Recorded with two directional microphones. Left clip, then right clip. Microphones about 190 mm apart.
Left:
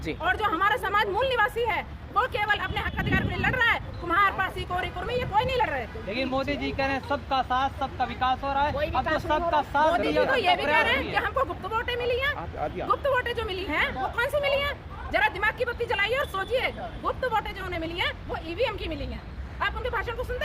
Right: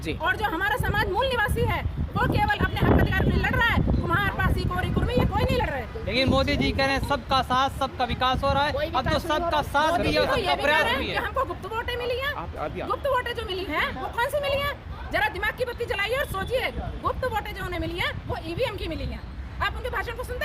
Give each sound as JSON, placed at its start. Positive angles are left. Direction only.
{"t": 0.2, "sound": "speech", "side_deg": 0}
{"t": 6.1, "sound": "speech", "side_deg": -55}
{"t": 10.2, "sound": "a woman's voice", "side_deg": 5}